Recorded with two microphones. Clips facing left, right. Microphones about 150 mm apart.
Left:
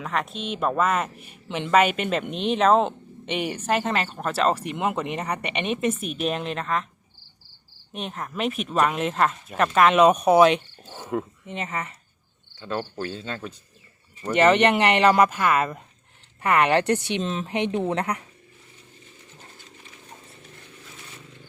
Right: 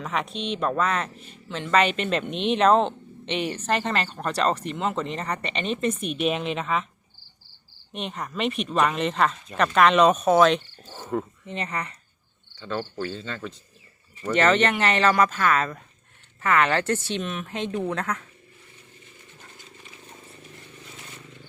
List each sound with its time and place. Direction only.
0.0 s speech: centre (ahead or behind)
7.9 s speech: centre (ahead or behind)
12.6 s speech: 15° left (ahead or behind)
17.2 s speech: 30° left (ahead or behind)